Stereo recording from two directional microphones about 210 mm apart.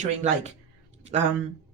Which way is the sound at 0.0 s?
30° right (ahead or behind).